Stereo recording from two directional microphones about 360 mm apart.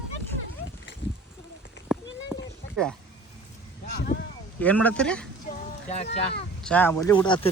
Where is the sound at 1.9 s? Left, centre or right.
Centre.